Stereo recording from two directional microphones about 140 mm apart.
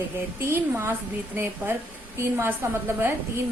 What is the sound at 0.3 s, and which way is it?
A woman's voice, 20° right (ahead or behind).